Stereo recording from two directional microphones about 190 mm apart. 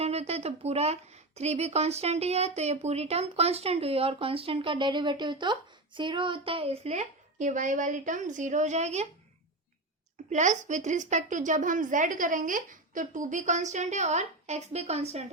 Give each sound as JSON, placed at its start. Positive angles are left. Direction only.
{"t": 0.0, "sound": "a woman's voice", "side_deg": -35}
{"t": 10.2, "sound": "a woman's voice", "side_deg": -40}